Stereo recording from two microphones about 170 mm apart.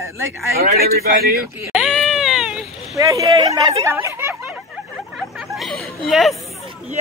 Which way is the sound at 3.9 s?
15° right (ahead or behind).